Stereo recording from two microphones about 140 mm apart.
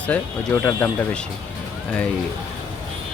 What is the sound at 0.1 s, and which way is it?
Speech, 15° left (ahead or behind).